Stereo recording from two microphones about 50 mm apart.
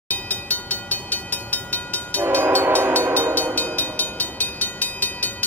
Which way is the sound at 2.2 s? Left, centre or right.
Right.